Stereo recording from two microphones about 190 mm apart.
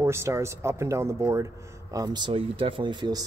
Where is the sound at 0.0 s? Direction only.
15° right (ahead or behind).